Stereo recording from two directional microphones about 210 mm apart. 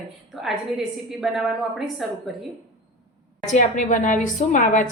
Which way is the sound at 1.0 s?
Centre (ahead or behind).